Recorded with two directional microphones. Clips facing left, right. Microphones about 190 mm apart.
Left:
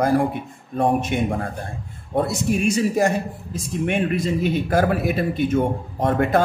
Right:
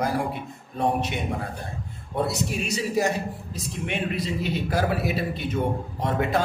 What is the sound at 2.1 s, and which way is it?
A man's voice, 50° left (ahead or behind).